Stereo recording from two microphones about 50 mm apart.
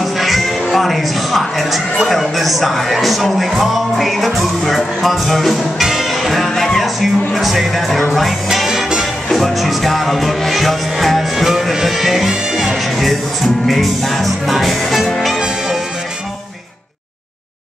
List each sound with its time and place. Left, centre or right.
0.0 s speech: centre
8.5 s music: centre
9.3 s music: centre
15.3 s music: centre